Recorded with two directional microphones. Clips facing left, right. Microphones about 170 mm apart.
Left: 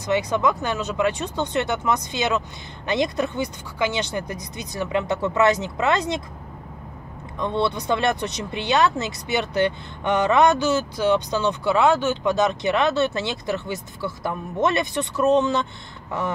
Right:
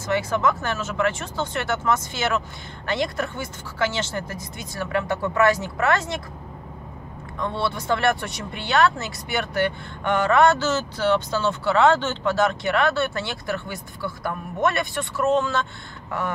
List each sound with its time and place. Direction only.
0.0 s speech: 20° left (ahead or behind)
7.3 s speech: 20° left (ahead or behind)